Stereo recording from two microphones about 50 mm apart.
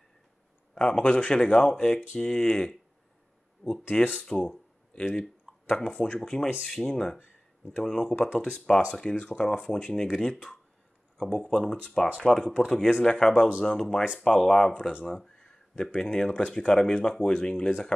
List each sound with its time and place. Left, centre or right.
0.7 s speech: centre
3.9 s speech: centre